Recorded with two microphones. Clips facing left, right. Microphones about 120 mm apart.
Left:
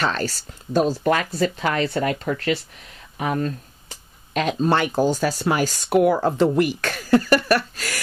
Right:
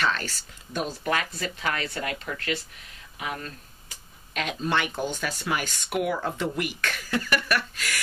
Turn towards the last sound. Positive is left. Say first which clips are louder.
# left 7 dB
turn(degrees=35)  # may be behind; listen again after turning